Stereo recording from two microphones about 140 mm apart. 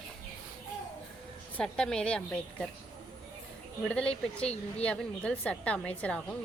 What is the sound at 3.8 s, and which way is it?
Speech, 10° left (ahead or behind).